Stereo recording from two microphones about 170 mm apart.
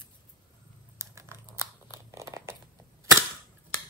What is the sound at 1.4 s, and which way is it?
Tearing, 15° right (ahead or behind).